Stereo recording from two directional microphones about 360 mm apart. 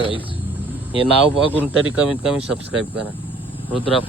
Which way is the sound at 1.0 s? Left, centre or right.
Centre.